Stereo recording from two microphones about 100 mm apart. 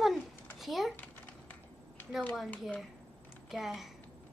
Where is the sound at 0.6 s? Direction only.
Centre (ahead or behind).